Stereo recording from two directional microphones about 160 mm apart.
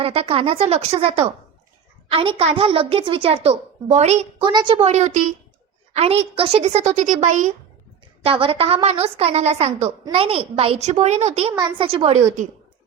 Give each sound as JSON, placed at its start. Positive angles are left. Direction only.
{"t": 0.0, "sound": "a woman's voice", "side_deg": -35}
{"t": 4.4, "sound": "a woman's voice", "side_deg": -30}
{"t": 4.9, "sound": "a woman's voice", "side_deg": -45}
{"t": 8.2, "sound": "a woman's voice", "side_deg": -35}